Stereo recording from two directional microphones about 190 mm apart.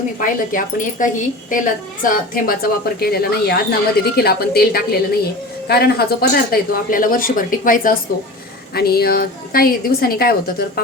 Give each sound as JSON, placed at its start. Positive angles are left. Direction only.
{"t": 0.2, "sound": "a woman's voice", "side_deg": 45}